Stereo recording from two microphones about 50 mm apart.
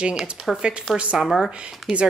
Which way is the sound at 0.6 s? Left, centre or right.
Centre.